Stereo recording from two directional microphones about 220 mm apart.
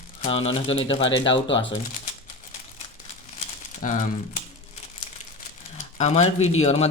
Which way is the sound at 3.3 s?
35° left (ahead or behind).